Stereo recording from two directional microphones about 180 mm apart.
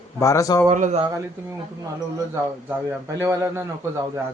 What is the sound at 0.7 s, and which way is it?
Speech, 40° right (ahead or behind).